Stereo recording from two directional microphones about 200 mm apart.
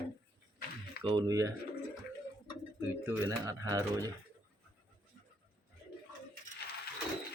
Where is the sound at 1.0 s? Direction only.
20° right (ahead or behind).